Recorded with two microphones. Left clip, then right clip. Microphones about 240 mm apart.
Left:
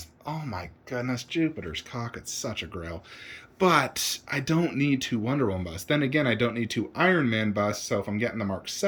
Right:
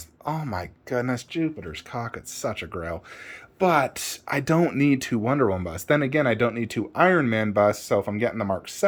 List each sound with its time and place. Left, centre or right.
0.3 s speech: right
1.3 s speech: centre